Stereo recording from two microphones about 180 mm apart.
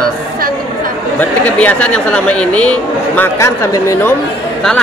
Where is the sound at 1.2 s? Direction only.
5° left (ahead or behind).